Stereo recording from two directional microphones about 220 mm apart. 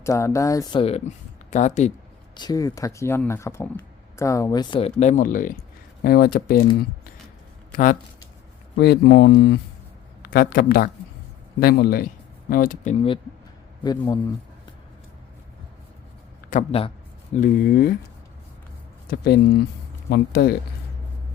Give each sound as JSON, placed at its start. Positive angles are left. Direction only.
{"t": 0.0, "sound": "speech", "side_deg": 15}
{"t": 2.3, "sound": "speech", "side_deg": 20}
{"t": 8.8, "sound": "speech", "side_deg": 50}
{"t": 16.5, "sound": "a man's voice", "side_deg": 30}
{"t": 19.0, "sound": "speech", "side_deg": 45}